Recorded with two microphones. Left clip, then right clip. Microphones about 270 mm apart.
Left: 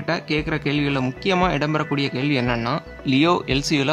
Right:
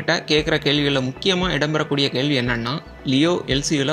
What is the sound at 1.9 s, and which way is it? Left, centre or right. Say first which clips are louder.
Speech: right 3 dB; left.